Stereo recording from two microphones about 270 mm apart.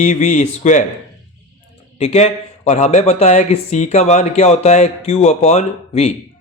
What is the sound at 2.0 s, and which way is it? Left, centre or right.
Speech, left.